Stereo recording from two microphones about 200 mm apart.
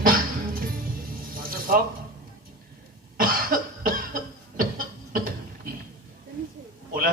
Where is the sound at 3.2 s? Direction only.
45° right (ahead or behind).